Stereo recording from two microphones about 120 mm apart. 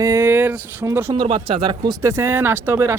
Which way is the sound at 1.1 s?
45° right (ahead or behind).